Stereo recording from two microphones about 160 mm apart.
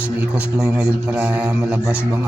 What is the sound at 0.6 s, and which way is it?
Music, 10° right (ahead or behind).